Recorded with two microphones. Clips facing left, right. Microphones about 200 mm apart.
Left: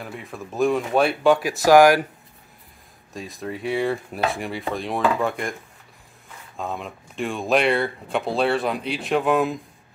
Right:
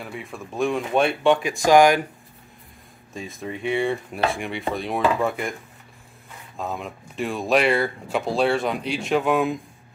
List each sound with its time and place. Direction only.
0.0 s speech: centre (ahead or behind)
3.1 s speech: centre (ahead or behind)